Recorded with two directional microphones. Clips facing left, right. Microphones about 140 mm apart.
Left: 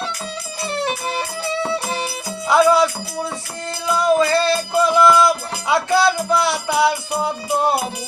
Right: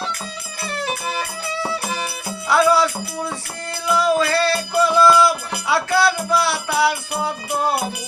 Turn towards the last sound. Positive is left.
turn(degrees=20)  # may be behind; listen again after turning